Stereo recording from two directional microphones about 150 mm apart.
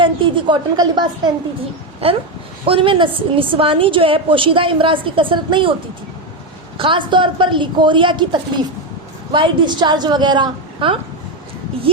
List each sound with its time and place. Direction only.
0.0 s a woman's voice: 35° right (ahead or behind)
2.0 s a woman's voice: 40° right (ahead or behind)
6.7 s a woman's voice: 35° right (ahead or behind)